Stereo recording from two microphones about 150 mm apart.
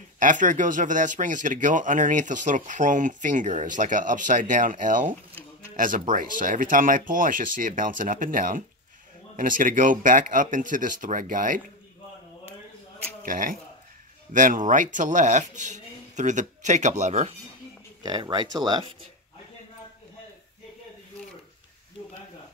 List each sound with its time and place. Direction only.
0.2 s speech: 60° right (ahead or behind)
13.2 s speech: 65° right (ahead or behind); by 17.3 s 50° right (ahead or behind)
18.0 s speech: 30° right (ahead or behind)